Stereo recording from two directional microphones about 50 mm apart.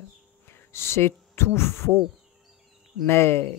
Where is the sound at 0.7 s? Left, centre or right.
Left.